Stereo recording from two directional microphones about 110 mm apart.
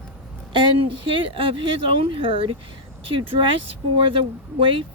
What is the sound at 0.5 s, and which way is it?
Speech, 50° right (ahead or behind).